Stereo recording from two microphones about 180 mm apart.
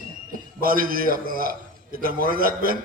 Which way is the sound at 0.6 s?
55° right (ahead or behind).